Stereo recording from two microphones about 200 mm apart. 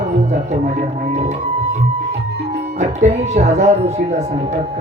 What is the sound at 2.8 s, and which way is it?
Speech, 35° right (ahead or behind).